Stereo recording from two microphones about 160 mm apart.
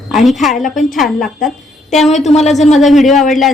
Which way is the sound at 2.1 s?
45° left (ahead or behind).